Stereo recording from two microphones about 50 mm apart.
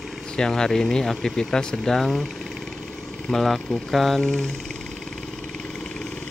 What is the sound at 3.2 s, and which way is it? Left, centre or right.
Speech, centre.